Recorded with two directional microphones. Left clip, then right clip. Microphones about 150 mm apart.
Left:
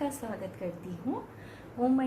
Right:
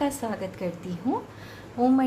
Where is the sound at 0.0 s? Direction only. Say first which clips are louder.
Right 7 dB; 45° right (ahead or behind).